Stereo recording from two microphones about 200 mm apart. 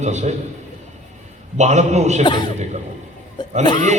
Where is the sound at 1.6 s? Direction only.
35° right (ahead or behind).